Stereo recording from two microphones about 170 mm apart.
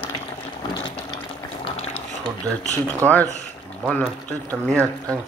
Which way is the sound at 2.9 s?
10° left (ahead or behind).